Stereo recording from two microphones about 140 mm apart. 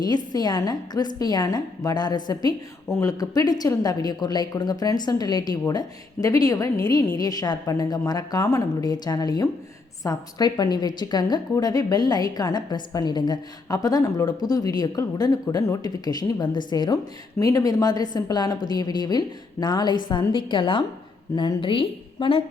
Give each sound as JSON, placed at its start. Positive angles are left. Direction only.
{"t": 0.0, "sound": "a woman's voice", "side_deg": 30}